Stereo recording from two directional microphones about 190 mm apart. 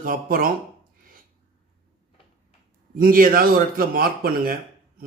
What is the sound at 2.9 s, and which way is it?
A man's voice, 50° right (ahead or behind).